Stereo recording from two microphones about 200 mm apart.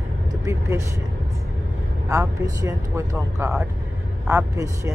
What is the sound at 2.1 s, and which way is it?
Speech, 15° right (ahead or behind).